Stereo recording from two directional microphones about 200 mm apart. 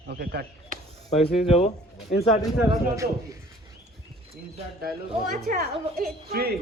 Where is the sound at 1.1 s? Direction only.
30° left (ahead or behind).